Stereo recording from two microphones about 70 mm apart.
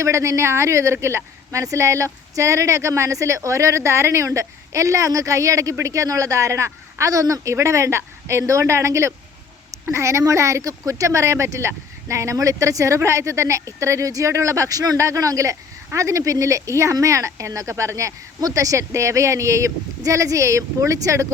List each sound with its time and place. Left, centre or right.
0.0 s speech: right
14.9 s speech: right